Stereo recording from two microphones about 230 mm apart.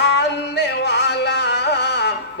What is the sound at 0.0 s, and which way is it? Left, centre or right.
Music, left.